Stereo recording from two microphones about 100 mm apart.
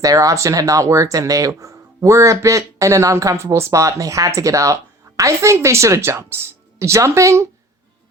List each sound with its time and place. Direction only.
0.0 s speech: 35° right (ahead or behind)